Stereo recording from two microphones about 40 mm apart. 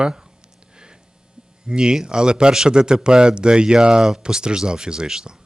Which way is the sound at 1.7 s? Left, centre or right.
Right.